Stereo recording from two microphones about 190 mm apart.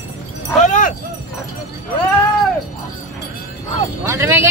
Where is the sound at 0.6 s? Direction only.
40° left (ahead or behind).